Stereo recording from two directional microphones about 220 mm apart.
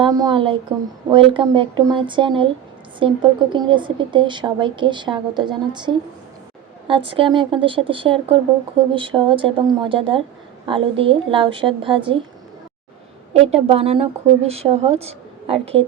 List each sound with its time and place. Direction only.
0.0 s a woman's voice: 20° right (ahead or behind)
13.7 s a woman's voice: 25° right (ahead or behind)